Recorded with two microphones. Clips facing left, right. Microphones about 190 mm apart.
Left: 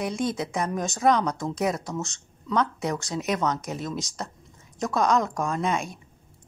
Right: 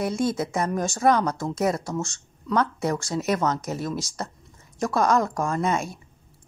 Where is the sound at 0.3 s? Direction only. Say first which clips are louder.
Right 2 dB; 5° right (ahead or behind).